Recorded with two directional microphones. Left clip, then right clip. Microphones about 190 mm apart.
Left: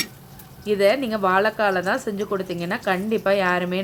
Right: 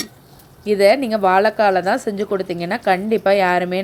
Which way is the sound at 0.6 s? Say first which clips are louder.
Right 5 dB; 30° right (ahead or behind).